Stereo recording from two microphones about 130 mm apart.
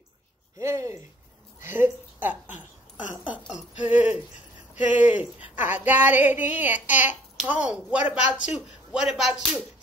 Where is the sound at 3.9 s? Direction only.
10° right (ahead or behind).